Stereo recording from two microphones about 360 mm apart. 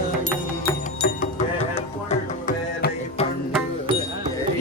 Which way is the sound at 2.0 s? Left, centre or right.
Centre.